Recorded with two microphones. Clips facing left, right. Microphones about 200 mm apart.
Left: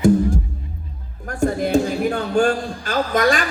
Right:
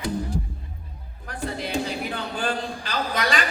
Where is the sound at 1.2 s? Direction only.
45° left (ahead or behind).